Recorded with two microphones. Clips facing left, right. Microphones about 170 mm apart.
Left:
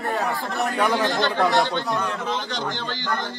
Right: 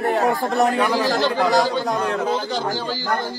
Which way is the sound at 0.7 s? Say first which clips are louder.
Right 2 dB; centre (ahead or behind).